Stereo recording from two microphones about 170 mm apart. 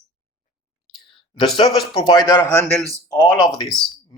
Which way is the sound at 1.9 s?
25° left (ahead or behind).